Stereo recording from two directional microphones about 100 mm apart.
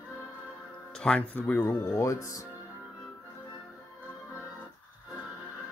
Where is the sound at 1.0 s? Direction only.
10° left (ahead or behind); by 2.4 s 30° left (ahead or behind).